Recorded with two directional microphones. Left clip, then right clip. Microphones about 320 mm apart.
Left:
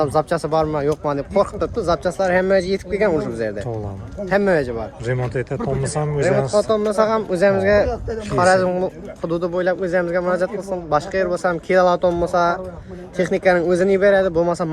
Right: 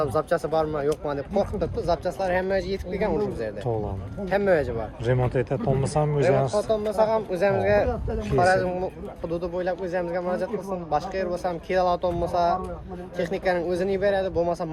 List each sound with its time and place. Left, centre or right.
0.0 s speech: left
5.0 s speech: centre
6.7 s speech: left